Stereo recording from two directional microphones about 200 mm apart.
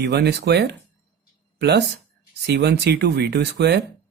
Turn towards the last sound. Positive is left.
turn(degrees=-55)  # may be behind; listen again after turning